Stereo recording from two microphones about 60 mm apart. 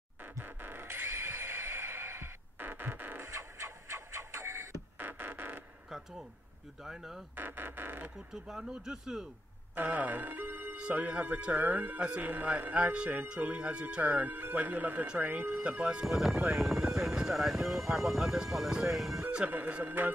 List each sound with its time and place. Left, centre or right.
0.4 s a sound: right
3.3 s a sound: right
4.9 s music: right
5.9 s a sound: centre
6.8 s speech: centre
7.3 s speech: right
8.3 s speech: centre
9.8 s speech: right
10.8 s speech: centre
14.0 s speech: right
15.7 s speech: centre
19.8 s speech: right